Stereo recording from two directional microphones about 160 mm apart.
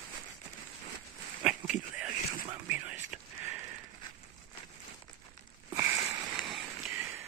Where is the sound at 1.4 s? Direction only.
5° right (ahead or behind).